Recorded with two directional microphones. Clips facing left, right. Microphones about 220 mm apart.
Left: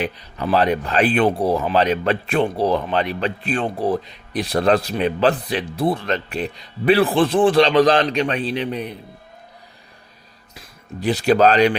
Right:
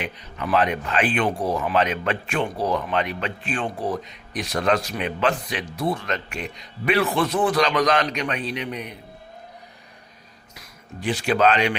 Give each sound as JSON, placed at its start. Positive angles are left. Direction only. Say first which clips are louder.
{"t": 0.0, "sound": "speech", "louder": "left 6 dB", "side_deg": 35}
{"t": 10.5, "sound": "speech", "louder": "left 5 dB", "side_deg": 35}